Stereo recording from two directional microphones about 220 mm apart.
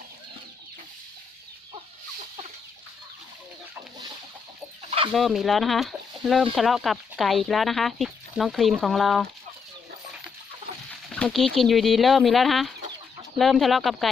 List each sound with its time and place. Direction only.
4.9 s chicken: 25° right (ahead or behind)
5.1 s speech: centre (ahead or behind)
10.7 s chicken: 40° right (ahead or behind)
11.1 s speech: 5° left (ahead or behind)